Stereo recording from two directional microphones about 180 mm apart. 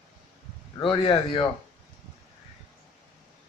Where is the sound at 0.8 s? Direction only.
30° left (ahead or behind).